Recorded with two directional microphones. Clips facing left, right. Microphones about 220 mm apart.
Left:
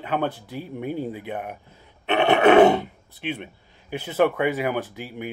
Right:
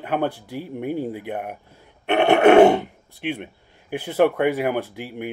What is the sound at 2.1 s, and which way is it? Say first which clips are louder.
Roar: right 2 dB; 55° right (ahead or behind).